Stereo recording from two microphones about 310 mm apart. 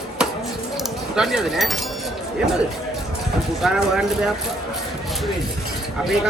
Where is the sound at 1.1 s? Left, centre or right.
Centre.